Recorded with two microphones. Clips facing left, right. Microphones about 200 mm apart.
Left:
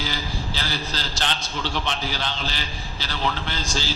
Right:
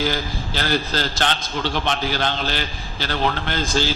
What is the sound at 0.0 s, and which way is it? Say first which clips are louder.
A man's voice: right 6 dB; 55° right (ahead or behind).